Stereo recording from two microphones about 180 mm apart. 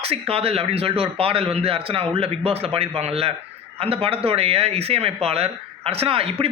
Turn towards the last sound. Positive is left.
turn(degrees=-30)  # may be behind; listen again after turning